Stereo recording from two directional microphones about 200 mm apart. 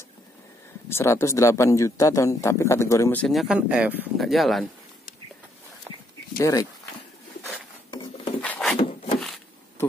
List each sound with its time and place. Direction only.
0.8 s speech: 10° left (ahead or behind)
6.3 s speech: 20° left (ahead or behind)
7.9 s wood: 20° left (ahead or behind)
8.4 s wood: 5° left (ahead or behind)
8.7 s wood: 25° left (ahead or behind)